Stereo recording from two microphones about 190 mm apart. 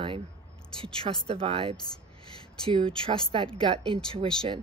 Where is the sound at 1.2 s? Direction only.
30° right (ahead or behind).